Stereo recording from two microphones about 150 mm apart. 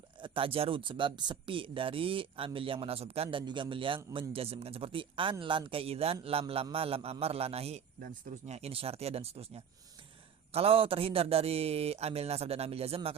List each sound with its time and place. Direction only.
0.2 s speech: 35° right (ahead or behind)